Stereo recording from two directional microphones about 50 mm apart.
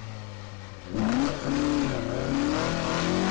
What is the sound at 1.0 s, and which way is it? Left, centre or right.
Vehicle, left.